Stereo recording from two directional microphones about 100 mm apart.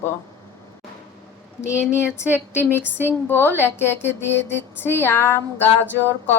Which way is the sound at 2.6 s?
20° left (ahead or behind).